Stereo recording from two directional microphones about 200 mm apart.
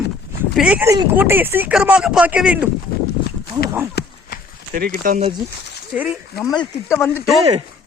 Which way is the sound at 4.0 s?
55° left (ahead or behind).